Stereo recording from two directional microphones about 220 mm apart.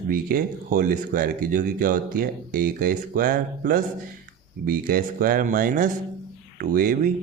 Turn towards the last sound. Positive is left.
turn(degrees=-40)  # may be behind; listen again after turning